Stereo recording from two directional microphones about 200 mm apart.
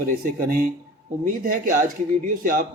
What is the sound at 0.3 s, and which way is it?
Speech, 45° right (ahead or behind).